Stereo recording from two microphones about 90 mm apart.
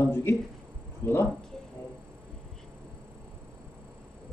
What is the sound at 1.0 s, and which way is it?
Speech, 25° left (ahead or behind).